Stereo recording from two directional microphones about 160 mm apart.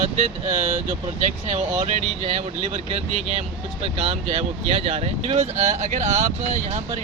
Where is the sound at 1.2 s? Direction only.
45° right (ahead or behind).